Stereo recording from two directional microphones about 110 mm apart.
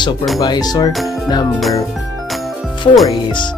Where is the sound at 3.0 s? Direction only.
45° left (ahead or behind).